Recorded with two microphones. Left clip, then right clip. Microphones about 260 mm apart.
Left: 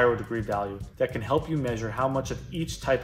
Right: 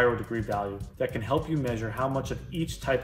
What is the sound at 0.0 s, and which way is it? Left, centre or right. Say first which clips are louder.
Speech: left 2 dB; centre.